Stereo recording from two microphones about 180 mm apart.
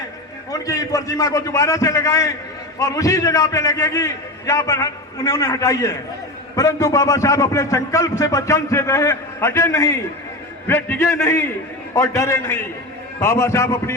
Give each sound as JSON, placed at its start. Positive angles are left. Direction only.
{"t": 0.6, "sound": "a man's voice", "side_deg": 20}